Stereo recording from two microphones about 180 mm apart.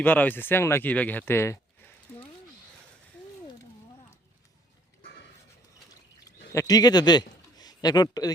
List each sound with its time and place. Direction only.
0.0 s speech: 10° left (ahead or behind)
6.5 s speech: 20° left (ahead or behind)